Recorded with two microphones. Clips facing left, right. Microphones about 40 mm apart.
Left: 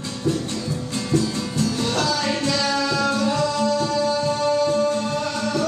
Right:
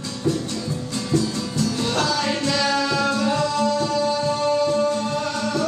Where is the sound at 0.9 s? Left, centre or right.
Left.